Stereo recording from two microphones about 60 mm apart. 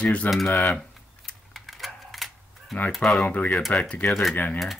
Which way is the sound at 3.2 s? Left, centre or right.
Left.